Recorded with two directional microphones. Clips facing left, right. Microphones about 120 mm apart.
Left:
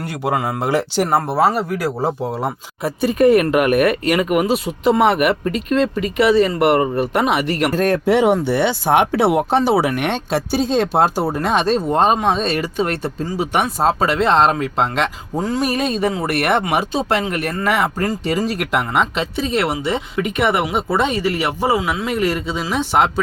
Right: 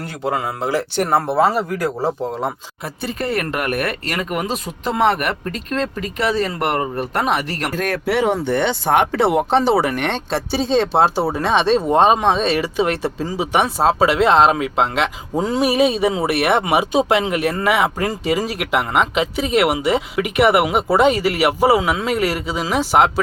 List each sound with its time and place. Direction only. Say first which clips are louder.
0.3 s speech: left 2 dB; 15° left (ahead or behind)
1.1 s speech: right 1 dB; 5° left (ahead or behind)
8.0 s speech: left 1 dB; 15° left (ahead or behind); by 15.1 s 5° right (ahead or behind)
15.4 s speech: right 1 dB; 20° right (ahead or behind)
15.6 s speech: right 5 dB; 5° right (ahead or behind)